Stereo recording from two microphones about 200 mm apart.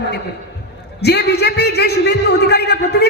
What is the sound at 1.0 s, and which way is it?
A man's voice, 55° left (ahead or behind).